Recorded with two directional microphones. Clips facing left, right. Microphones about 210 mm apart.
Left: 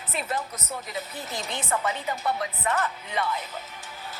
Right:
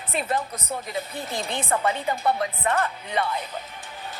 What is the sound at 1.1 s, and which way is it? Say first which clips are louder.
A woman's voice: right 4 dB; 25° right (ahead or behind).